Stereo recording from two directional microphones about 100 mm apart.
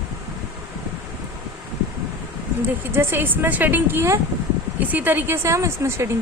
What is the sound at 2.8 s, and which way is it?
A woman's voice, 25° right (ahead or behind).